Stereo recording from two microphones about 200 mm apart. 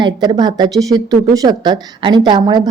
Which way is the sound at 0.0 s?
20° right (ahead or behind).